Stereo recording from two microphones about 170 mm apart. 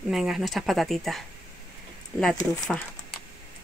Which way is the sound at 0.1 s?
Centre (ahead or behind).